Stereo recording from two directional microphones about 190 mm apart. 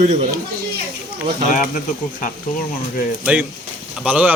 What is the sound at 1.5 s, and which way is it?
Speech, 45° left (ahead or behind).